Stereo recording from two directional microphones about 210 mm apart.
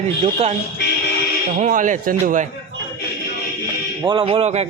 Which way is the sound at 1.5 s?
35° right (ahead or behind).